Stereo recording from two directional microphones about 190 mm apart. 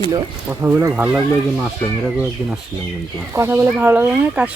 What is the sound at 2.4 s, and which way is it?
Speech, 10° right (ahead or behind).